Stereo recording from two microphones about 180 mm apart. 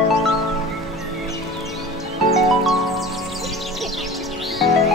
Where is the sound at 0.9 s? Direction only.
Centre (ahead or behind).